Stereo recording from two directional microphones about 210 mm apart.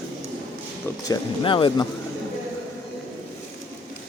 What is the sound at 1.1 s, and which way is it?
Speech, 25° left (ahead or behind).